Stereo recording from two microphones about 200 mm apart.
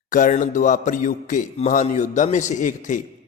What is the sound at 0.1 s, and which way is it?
A man's voice, 40° left (ahead or behind).